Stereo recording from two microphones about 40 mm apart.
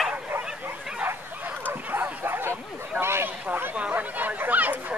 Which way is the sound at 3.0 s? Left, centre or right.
Right.